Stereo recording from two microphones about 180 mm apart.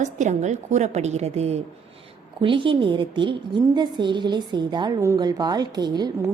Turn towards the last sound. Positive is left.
turn(degrees=-25)  # may be behind; listen again after turning